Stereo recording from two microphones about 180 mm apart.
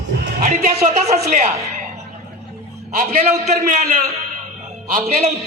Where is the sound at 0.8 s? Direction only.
40° right (ahead or behind).